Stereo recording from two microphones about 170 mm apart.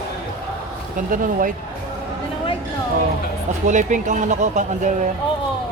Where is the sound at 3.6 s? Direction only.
45° right (ahead or behind).